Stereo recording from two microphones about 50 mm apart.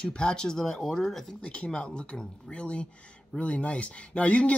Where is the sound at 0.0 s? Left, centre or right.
Centre.